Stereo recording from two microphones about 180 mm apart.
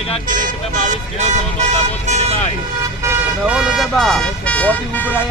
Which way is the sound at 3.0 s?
5° right (ahead or behind).